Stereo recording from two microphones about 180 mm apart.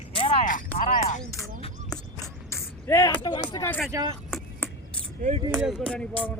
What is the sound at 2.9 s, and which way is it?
Speech, 15° left (ahead or behind).